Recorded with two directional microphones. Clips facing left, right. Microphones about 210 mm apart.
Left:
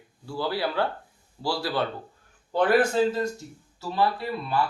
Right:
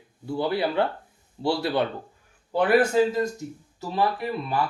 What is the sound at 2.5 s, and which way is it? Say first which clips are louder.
Speech: right 2 dB; 10° right (ahead or behind).